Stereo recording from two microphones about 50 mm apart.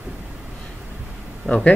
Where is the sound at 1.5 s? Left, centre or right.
Centre.